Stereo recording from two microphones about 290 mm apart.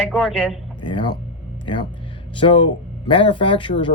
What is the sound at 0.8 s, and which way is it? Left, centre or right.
Speech, centre.